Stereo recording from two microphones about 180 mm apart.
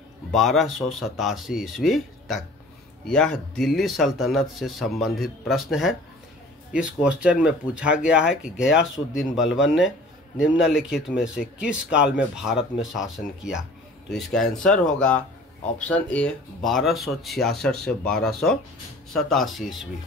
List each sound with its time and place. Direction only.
0.3 s speech: centre (ahead or behind)